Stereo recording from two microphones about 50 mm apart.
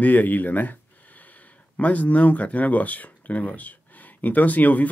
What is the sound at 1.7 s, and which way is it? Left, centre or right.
Speech, left.